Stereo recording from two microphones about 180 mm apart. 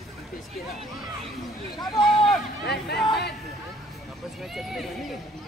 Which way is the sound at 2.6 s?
65° left (ahead or behind).